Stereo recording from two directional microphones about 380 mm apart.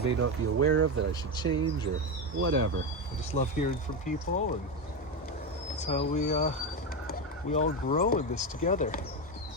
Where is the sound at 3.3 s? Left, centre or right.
Centre.